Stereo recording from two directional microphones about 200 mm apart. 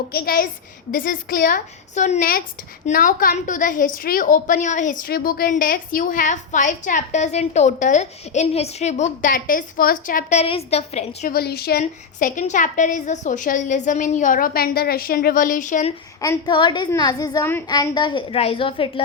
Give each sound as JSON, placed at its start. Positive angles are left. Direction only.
{"t": 0.1, "sound": "a woman's voice", "side_deg": 50}
{"t": 11.3, "sound": "a woman's voice", "side_deg": 50}
{"t": 16.2, "sound": "a woman's voice", "side_deg": 20}